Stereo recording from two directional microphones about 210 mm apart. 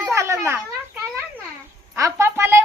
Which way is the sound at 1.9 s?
15° right (ahead or behind).